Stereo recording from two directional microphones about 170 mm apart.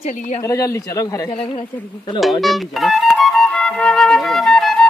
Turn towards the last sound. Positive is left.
turn(degrees=0)  # may be behind; listen again after turning